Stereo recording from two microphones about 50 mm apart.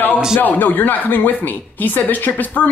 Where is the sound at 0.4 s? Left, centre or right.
Left.